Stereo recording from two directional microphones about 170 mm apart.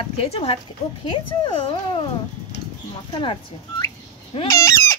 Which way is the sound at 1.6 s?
30° left (ahead or behind).